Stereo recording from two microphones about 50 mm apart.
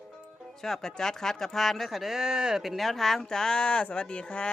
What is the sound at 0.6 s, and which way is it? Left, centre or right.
A woman's voice, centre.